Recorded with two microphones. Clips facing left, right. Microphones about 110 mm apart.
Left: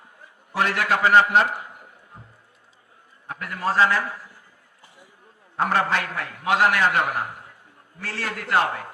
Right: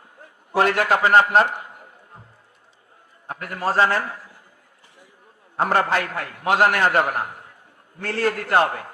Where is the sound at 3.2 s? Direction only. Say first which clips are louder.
Right 1 dB; 40° right (ahead or behind).